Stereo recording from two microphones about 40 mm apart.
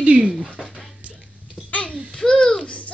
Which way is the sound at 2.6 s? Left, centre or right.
Left.